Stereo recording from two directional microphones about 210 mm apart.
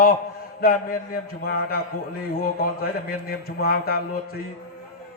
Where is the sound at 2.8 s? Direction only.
45° left (ahead or behind).